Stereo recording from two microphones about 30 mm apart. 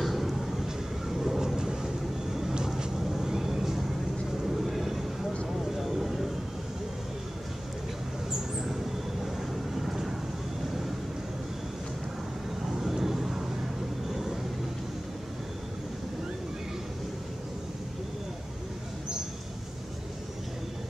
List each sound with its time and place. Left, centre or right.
0.0 s vehicle: centre
1.6 s vehicle: right
3.0 s vehicle: centre
8.3 s vehicle: centre
12.6 s vehicle: centre